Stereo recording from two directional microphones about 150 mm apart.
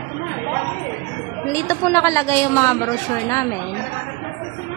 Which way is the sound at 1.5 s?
15° left (ahead or behind).